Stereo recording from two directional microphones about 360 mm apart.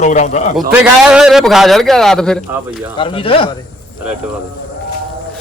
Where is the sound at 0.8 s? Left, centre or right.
Centre.